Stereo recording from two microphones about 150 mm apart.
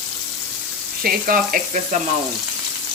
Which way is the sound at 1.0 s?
70° right (ahead or behind).